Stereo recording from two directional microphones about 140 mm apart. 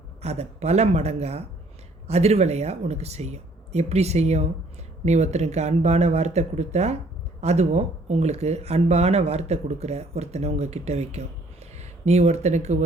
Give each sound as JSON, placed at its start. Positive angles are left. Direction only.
{"t": 0.2, "sound": "speech", "side_deg": -50}